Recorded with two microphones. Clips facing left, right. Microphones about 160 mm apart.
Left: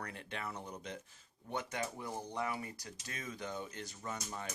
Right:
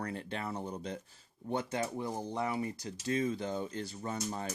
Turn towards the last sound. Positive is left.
turn(degrees=-35)  # may be behind; listen again after turning